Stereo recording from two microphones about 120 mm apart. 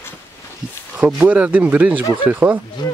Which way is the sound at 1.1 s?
15° right (ahead or behind).